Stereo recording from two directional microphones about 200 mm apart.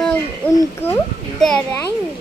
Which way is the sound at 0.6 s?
10° left (ahead or behind).